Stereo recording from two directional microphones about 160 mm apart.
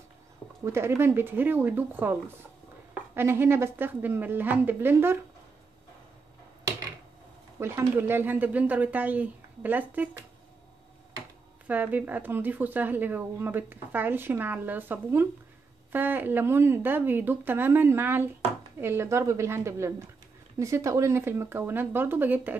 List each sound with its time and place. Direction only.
0.7 s a woman's voice: 15° right (ahead or behind)
7.5 s a woman's voice: 15° right (ahead or behind)
11.6 s a woman's voice: 10° right (ahead or behind)